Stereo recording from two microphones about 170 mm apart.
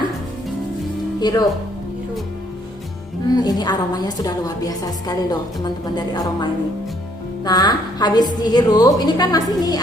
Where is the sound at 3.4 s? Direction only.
25° left (ahead or behind).